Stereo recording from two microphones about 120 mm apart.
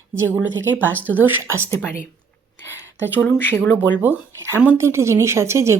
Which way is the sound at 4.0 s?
15° right (ahead or behind).